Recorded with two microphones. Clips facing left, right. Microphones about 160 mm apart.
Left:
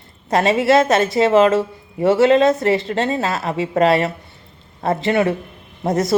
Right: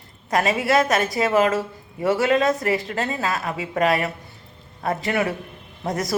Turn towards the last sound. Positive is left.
turn(degrees=25)  # may be behind; listen again after turning